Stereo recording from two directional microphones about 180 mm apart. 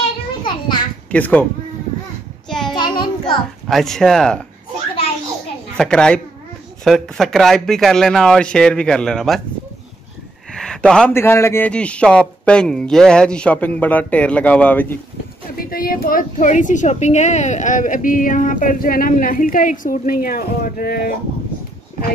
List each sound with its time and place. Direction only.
0.4 s a sound: 25° left (ahead or behind)
1.1 s a man's voice: 10° left (ahead or behind)
2.7 s child singing: 25° left (ahead or behind)
3.6 s speech: centre (ahead or behind)
5.8 s speech: 5° left (ahead or behind)
10.5 s a man's voice: 5° left (ahead or behind)
15.5 s a woman's voice: 55° left (ahead or behind)